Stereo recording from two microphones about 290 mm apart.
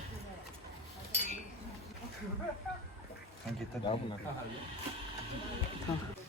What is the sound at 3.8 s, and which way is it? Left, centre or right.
Speech, centre.